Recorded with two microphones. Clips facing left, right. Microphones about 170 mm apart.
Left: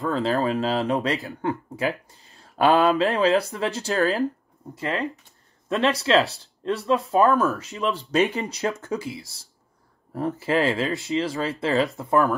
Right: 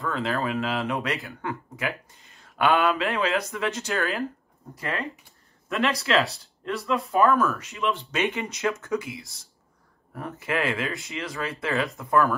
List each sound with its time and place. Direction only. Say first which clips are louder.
0.1 s speech: left 5 dB; 30° left (ahead or behind)